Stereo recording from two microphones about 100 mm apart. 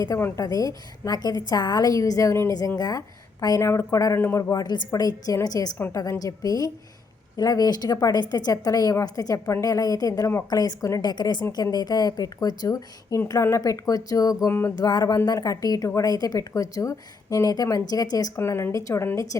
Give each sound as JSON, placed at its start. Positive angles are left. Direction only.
{"t": 0.2, "sound": "a woman's voice", "side_deg": 25}
{"t": 0.4, "sound": "a woman's voice", "side_deg": 40}
{"t": 2.5, "sound": "a woman's voice", "side_deg": 40}
{"t": 3.6, "sound": "a woman's voice", "side_deg": 25}
{"t": 5.7, "sound": "a woman's voice", "side_deg": 25}
{"t": 6.0, "sound": "a woman's voice", "side_deg": 35}
{"t": 11.1, "sound": "a woman's voice", "side_deg": 45}
{"t": 14.4, "sound": "a woman's voice", "side_deg": 25}
{"t": 14.8, "sound": "a woman's voice", "side_deg": 40}
{"t": 18.3, "sound": "a woman's voice", "side_deg": 25}